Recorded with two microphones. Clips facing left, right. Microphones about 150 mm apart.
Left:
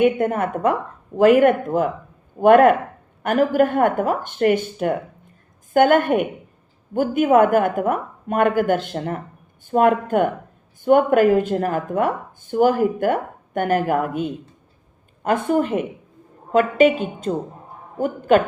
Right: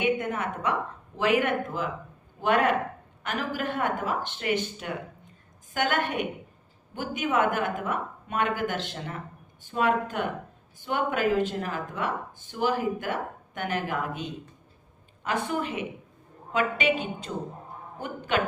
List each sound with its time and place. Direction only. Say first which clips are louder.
0.0 s a woman's voice: left 9 dB; 50° left (ahead or behind)
15.4 s a woman's voice: left 10 dB; 45° left (ahead or behind)
16.5 s a sound: left 11 dB; 45° left (ahead or behind)
17.3 s a woman's voice: left 10 dB; 45° left (ahead or behind)